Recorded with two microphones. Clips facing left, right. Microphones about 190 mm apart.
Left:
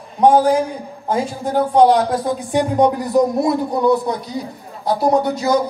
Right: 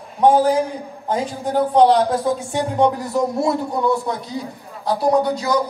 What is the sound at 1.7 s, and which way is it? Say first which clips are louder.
Speech: left 1 dB; 10° left (ahead or behind).